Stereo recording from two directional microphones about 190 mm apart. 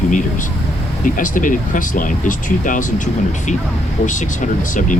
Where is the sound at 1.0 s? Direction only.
45° left (ahead or behind).